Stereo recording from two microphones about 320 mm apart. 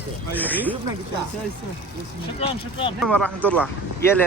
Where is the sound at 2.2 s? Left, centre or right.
Centre.